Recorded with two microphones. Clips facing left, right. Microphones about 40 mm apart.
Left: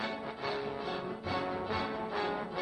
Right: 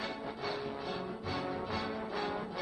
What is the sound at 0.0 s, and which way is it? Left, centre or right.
Music, centre.